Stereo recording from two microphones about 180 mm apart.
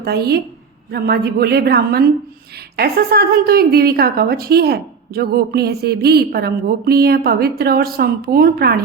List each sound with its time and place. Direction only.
0.0 s a woman's voice: 60° right (ahead or behind)